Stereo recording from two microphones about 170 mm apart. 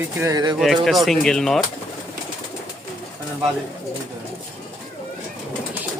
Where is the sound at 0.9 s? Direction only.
Centre (ahead or behind).